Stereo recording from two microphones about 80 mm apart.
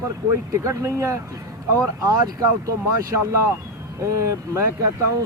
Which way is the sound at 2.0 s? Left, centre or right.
Right.